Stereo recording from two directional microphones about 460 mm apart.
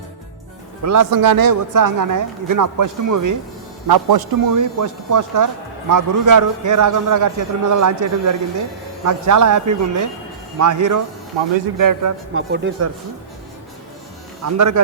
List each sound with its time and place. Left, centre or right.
0.8 s a man's voice: right
3.8 s a man's voice: right
11.3 s speech: right
11.8 s a man's voice: right
12.3 s speech: right
14.4 s a man's voice: right